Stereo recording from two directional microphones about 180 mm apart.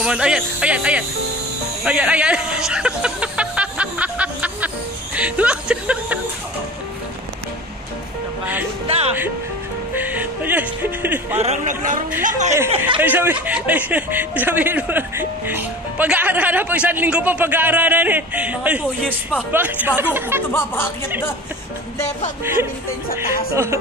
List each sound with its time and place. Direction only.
0.0 s speech: 5° right (ahead or behind)
1.9 s music: 5° right (ahead or behind)
8.8 s speech: 35° right (ahead or behind)
9.9 s speech: 10° right (ahead or behind)
11.3 s a man's voice: 40° right (ahead or behind)
13.0 s speech: 10° right (ahead or behind)
22.4 s speech: 15° right (ahead or behind)